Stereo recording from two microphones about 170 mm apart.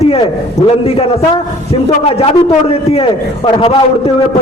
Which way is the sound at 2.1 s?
35° left (ahead or behind).